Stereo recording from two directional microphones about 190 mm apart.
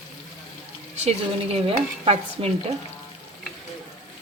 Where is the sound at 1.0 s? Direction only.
35° right (ahead or behind).